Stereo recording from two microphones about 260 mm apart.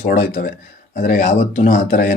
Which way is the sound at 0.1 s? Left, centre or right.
Left.